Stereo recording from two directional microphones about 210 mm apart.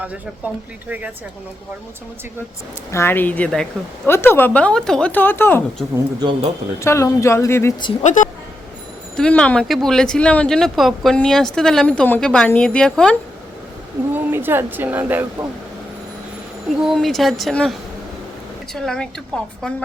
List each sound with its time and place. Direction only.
0.0 s speech: 5° right (ahead or behind)
2.9 s speech: 10° left (ahead or behind)
6.1 s speech: 20° right (ahead or behind)
6.7 s speech: 15° left (ahead or behind)
8.0 s a woman's voice: 35° left (ahead or behind)
9.1 s speech: 5° left (ahead or behind)
14.1 s speech: 10° right (ahead or behind)
16.8 s speech: centre (ahead or behind)